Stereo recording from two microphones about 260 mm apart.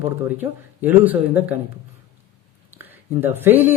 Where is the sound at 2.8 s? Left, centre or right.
Centre.